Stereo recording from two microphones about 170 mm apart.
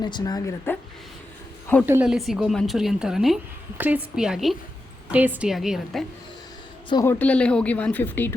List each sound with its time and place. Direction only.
0.0 s speech: 25° left (ahead or behind)
1.9 s a woman's voice: 5° right (ahead or behind)
7.0 s speech: 10° left (ahead or behind)